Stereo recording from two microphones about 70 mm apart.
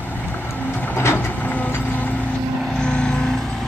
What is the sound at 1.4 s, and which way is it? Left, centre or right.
Vehicle, left.